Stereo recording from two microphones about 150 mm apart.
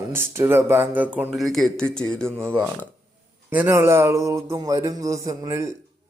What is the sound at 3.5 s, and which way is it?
Speech, 15° right (ahead or behind).